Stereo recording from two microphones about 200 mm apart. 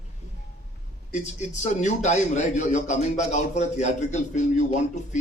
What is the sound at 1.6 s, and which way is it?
A man's voice, 35° left (ahead or behind).